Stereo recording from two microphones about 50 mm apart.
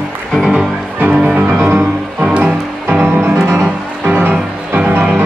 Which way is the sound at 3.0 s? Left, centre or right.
Right.